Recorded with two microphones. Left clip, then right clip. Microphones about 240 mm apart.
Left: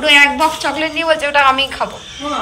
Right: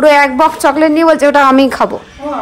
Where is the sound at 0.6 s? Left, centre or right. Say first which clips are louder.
Right 9 dB; right.